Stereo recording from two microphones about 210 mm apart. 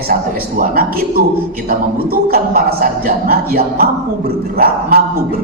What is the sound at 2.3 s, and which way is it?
Speech, 45° right (ahead or behind).